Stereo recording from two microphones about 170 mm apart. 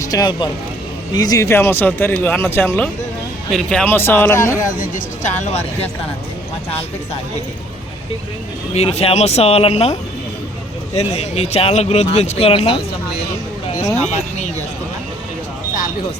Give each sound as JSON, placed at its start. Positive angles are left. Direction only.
{"t": 0.0, "sound": "speech", "side_deg": 20}
{"t": 4.8, "sound": "speech", "side_deg": 45}
{"t": 8.7, "sound": "speech", "side_deg": 40}